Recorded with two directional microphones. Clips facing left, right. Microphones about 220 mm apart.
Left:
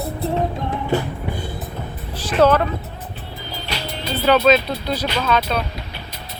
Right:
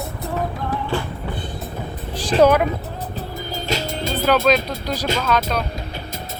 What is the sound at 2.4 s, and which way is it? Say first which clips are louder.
Speech: right 1 dB; 10° right (ahead or behind).